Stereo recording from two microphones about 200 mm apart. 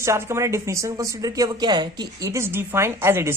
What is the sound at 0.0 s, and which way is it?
Speech, 15° right (ahead or behind).